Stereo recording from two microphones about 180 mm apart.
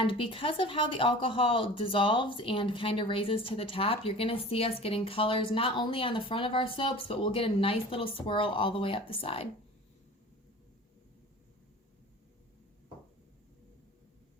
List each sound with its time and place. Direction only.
0.0 s speech: 30° left (ahead or behind)